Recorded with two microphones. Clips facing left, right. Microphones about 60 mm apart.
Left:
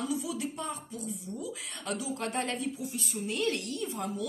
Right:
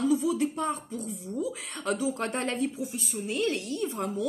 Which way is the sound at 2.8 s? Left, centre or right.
Right.